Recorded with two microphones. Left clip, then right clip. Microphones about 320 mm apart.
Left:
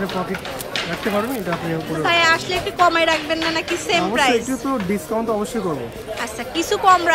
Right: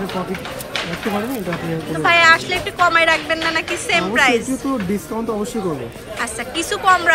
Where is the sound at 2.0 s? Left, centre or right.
Centre.